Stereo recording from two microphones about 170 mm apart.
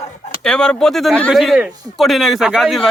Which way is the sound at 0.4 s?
5° left (ahead or behind).